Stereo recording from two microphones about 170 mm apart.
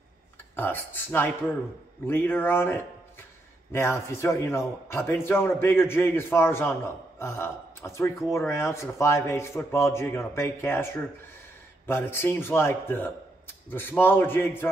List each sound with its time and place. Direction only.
0.6 s a man's voice: 10° left (ahead or behind)